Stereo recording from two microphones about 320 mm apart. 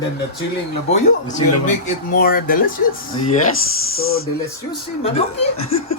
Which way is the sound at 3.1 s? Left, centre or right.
Left.